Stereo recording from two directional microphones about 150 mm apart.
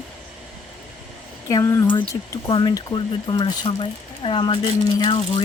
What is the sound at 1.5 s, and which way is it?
Speech, 20° left (ahead or behind).